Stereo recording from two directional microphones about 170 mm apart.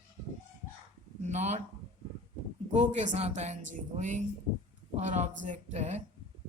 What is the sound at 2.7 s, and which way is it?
Speech, 45° right (ahead or behind).